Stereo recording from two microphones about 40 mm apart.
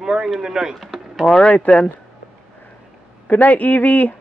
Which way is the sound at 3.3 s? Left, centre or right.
Left.